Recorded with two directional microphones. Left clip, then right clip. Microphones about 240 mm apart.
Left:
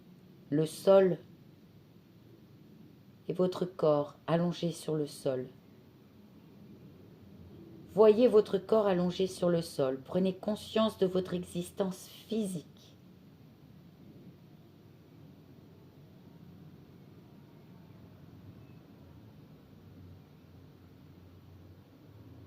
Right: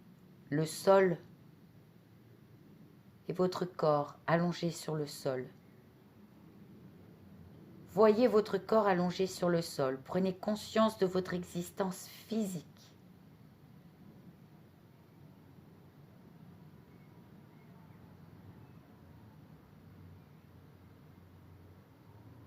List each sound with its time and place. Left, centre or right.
0.5 s speech: right
3.2 s speech: right
7.9 s speech: right